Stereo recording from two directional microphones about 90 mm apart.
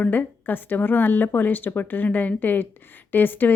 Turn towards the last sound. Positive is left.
turn(degrees=20)  # may be behind; listen again after turning